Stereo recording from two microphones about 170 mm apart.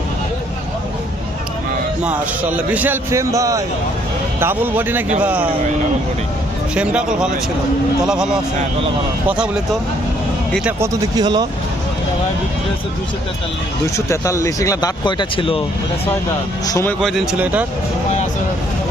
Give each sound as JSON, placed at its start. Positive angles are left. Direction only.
{"t": 2.0, "sound": "a man's voice", "side_deg": -10}
{"t": 6.7, "sound": "speech", "side_deg": -5}
{"t": 10.5, "sound": "a man's voice", "side_deg": -5}
{"t": 11.2, "sound": "speech", "side_deg": -25}
{"t": 13.8, "sound": "speech", "side_deg": 15}
{"t": 16.6, "sound": "speech", "side_deg": 20}
{"t": 17.0, "sound": "speech", "side_deg": 0}